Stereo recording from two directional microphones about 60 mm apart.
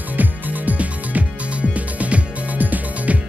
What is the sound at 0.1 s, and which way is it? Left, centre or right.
Music, right.